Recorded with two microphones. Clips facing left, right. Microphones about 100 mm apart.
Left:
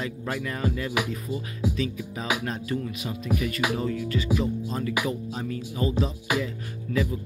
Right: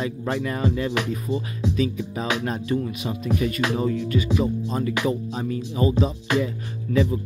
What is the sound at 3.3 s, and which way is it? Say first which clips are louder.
Speech: right 3 dB; 25° right (ahead or behind).